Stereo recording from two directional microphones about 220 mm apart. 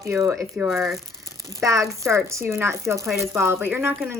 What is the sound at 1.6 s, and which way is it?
Speech, 15° right (ahead or behind).